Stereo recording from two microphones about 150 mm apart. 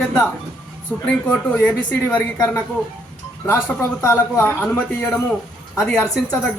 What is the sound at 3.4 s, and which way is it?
Speech, 15° left (ahead or behind).